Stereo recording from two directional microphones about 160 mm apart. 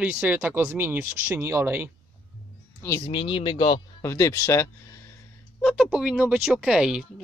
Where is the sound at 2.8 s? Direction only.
20° left (ahead or behind).